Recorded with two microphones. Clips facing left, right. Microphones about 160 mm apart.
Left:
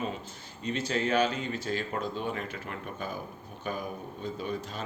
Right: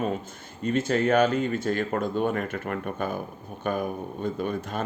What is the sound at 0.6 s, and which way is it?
A man's voice, 50° right (ahead or behind).